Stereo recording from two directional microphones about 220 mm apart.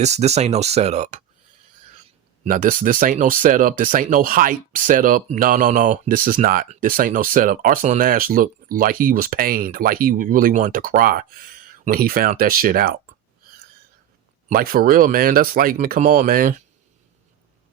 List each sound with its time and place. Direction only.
0.0 s speech: 30° right (ahead or behind)
2.4 s speech: 40° right (ahead or behind)
14.4 s speech: 40° right (ahead or behind)